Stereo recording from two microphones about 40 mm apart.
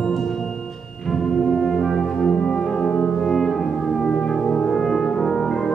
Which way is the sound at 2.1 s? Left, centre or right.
Left.